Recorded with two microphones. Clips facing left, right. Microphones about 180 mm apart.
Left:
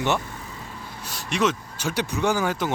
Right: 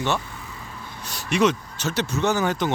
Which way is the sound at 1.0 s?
Centre (ahead or behind).